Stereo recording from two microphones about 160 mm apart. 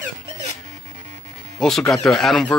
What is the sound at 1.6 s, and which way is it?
Speech, 5° left (ahead or behind).